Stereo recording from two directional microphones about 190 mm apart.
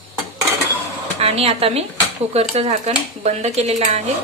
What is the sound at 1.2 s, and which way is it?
Speech, 30° right (ahead or behind).